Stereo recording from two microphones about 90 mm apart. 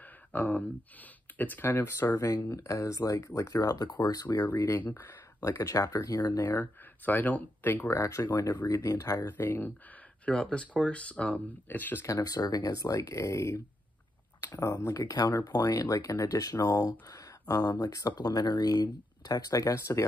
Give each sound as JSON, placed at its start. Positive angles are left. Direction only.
{"t": 0.3, "sound": "speech", "side_deg": 20}
{"t": 4.5, "sound": "speech", "side_deg": 30}
{"t": 5.4, "sound": "speech", "side_deg": 35}
{"t": 6.5, "sound": "speech", "side_deg": 20}
{"t": 9.4, "sound": "speech", "side_deg": 25}
{"t": 10.2, "sound": "speech", "side_deg": 10}
{"t": 12.1, "sound": "speech", "side_deg": 45}
{"t": 15.0, "sound": "speech", "side_deg": 50}